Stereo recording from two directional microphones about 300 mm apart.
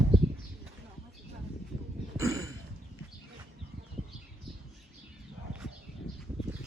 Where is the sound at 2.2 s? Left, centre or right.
Centre.